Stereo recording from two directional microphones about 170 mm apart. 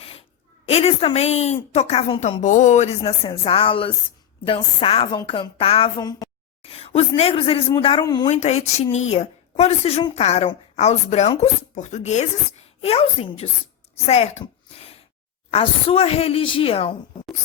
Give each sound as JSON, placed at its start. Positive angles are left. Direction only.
{"t": 0.0, "sound": "a sound", "side_deg": 35}
{"t": 1.7, "sound": "a woman's voice", "side_deg": 40}
{"t": 2.4, "sound": "speech", "side_deg": 45}
{"t": 3.0, "sound": "a woman's voice", "side_deg": 30}
{"t": 6.6, "sound": "a sound", "side_deg": 35}
{"t": 7.2, "sound": "a woman's voice", "side_deg": 35}
{"t": 8.4, "sound": "a woman's voice", "side_deg": 40}
{"t": 15.4, "sound": "a woman's voice", "side_deg": 35}